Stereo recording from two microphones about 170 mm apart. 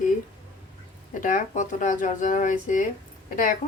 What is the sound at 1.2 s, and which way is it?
Speech, 50° left (ahead or behind).